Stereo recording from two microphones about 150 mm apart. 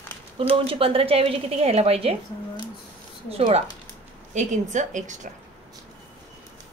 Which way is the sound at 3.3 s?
40° right (ahead or behind).